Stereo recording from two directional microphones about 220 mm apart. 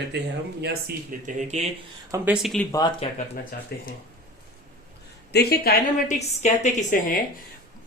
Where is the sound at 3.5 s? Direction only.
40° left (ahead or behind).